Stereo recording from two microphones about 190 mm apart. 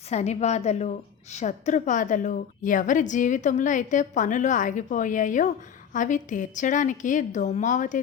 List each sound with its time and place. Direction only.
0.1 s a woman's voice: 35° left (ahead or behind)